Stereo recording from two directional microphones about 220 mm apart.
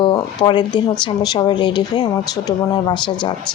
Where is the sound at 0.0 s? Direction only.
20° left (ahead or behind).